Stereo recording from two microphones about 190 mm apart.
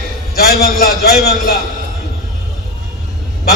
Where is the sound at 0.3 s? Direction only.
55° left (ahead or behind).